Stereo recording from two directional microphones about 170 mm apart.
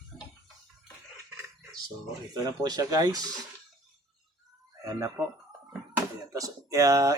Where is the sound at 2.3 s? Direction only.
20° right (ahead or behind).